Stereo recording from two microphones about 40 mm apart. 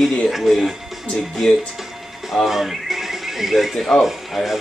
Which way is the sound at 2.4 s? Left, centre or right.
Centre.